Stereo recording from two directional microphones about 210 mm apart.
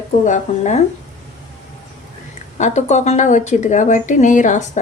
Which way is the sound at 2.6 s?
35° left (ahead or behind).